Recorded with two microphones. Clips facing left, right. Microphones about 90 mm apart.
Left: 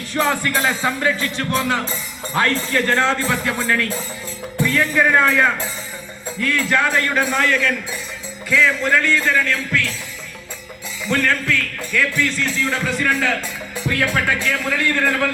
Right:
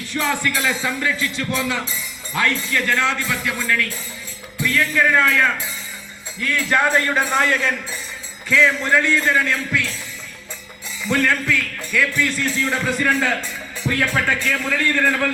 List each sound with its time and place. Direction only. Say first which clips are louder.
0.2 s speech: left 3 dB; 35° left (ahead or behind); by 5.5 s 15° left (ahead or behind)
6.4 s speech: left 1 dB; 5° right (ahead or behind)
7.3 s a man's voice: right 1 dB; 25° right (ahead or behind)
8.6 s music: even; 15° right (ahead or behind)
11.1 s speech: even; 5° right (ahead or behind); by 15.3 s 10° left (ahead or behind)